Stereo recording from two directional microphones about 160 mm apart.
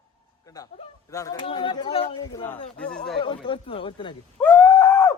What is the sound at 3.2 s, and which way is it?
Speech, 30° left (ahead or behind).